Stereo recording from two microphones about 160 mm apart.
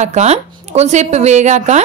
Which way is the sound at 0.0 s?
45° right (ahead or behind).